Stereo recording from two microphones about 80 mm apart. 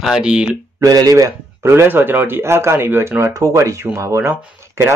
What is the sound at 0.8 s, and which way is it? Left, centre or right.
Speech, right.